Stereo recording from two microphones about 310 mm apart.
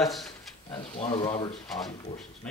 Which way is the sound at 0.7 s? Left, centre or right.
Centre.